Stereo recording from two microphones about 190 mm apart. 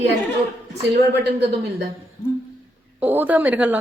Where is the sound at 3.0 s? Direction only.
10° right (ahead or behind).